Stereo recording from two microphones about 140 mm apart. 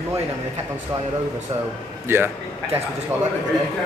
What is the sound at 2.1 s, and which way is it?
Speech, 15° right (ahead or behind).